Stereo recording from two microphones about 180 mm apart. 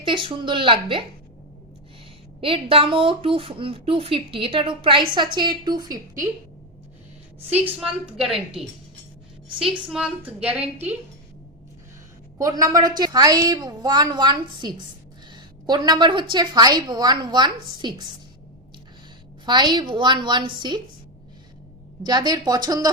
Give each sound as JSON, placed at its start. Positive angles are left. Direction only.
{"t": 0.0, "sound": "speech", "side_deg": -25}
{"t": 2.4, "sound": "speech", "side_deg": -30}
{"t": 7.6, "sound": "a woman's voice", "side_deg": -5}
{"t": 9.6, "sound": "a woman's voice", "side_deg": -5}
{"t": 12.4, "sound": "speech", "side_deg": -20}
{"t": 19.5, "sound": "speech", "side_deg": -25}
{"t": 22.0, "sound": "speech", "side_deg": -20}